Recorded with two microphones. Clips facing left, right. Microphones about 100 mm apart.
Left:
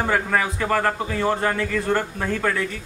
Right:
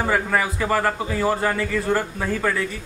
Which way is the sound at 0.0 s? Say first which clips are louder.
Even; 5° right (ahead or behind).